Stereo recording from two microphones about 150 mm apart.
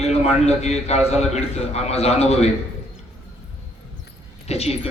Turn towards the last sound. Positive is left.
turn(degrees=45)  # may be behind; listen again after turning